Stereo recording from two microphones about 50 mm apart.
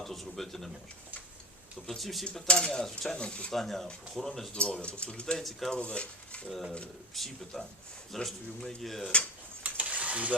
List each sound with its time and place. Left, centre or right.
0.0 s speech: centre
2.0 s speech: centre
2.5 s speech: centre
3.5 s speech: centre
4.5 s speech: left
5.4 s speech: centre
5.7 s cutlery: left
6.5 s speech: centre
9.6 s stir: right